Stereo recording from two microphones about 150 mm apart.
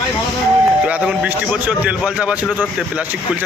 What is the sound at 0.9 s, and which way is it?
A man's voice, 10° right (ahead or behind).